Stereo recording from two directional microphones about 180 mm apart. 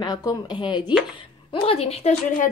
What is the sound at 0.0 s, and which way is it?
Speech, 20° left (ahead or behind).